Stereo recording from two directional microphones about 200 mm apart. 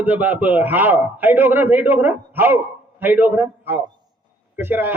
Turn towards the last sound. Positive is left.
turn(degrees=-10)  # may be behind; listen again after turning